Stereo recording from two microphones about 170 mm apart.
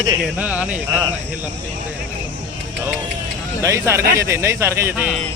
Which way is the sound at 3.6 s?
15° right (ahead or behind).